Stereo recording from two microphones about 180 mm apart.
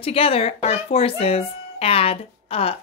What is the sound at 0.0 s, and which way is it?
Speech, 30° left (ahead or behind).